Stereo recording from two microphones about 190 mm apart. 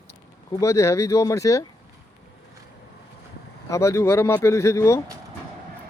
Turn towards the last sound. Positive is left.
turn(degrees=15)  # may be behind; listen again after turning